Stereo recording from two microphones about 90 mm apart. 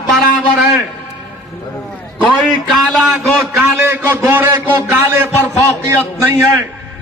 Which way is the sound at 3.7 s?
25° right (ahead or behind).